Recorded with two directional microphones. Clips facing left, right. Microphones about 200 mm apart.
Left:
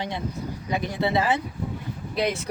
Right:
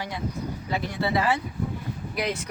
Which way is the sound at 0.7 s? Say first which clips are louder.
Left 2 dB; 20° left (ahead or behind).